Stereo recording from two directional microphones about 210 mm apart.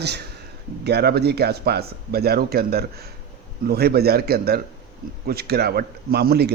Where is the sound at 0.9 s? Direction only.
50° right (ahead or behind).